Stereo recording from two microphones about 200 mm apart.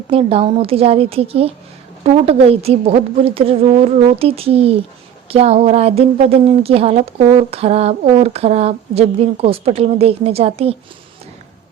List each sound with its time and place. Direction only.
0.1 s a woman's voice: 30° right (ahead or behind)